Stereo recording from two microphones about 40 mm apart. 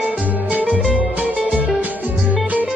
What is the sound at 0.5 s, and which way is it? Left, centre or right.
Music, right.